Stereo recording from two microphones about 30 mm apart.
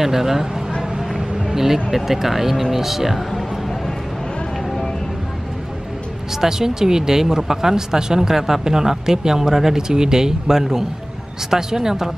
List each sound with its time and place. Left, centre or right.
0.0 s speech: centre
1.5 s speech: centre
6.4 s speech: centre